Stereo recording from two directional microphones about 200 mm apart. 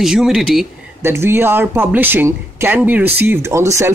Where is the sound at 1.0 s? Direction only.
10° right (ahead or behind).